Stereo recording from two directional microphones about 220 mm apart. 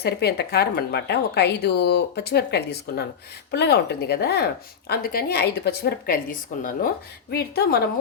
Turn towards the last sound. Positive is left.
turn(degrees=45)  # may be behind; listen again after turning